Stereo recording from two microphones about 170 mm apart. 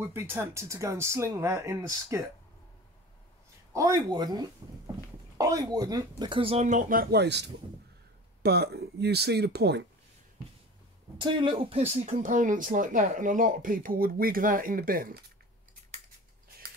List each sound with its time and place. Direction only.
0.1 s speech: 15° right (ahead or behind)
3.7 s speech: 20° right (ahead or behind); by 7.5 s 90° right
8.4 s speech: 70° right (ahead or behind)
11.1 s speech: 30° right (ahead or behind); by 15.2 s 55° right (ahead or behind)